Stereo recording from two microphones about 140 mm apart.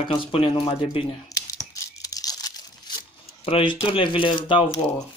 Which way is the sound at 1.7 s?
25° left (ahead or behind).